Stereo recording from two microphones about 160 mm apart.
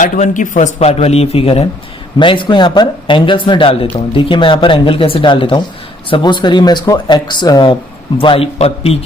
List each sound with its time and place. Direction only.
0.0 s a man's voice: 55° left (ahead or behind)